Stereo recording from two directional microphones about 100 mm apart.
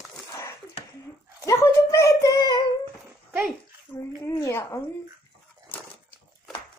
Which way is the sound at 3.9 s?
25° left (ahead or behind).